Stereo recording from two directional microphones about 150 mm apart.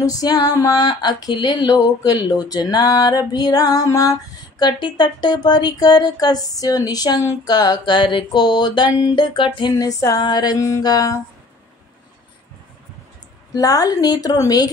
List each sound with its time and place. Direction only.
0.0 s female singing: 25° left (ahead or behind)
13.5 s female singing: 25° left (ahead or behind)